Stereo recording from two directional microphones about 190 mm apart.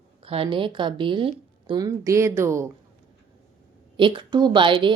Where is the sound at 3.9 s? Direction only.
25° right (ahead or behind).